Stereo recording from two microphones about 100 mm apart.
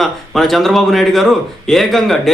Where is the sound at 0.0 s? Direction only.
Centre (ahead or behind).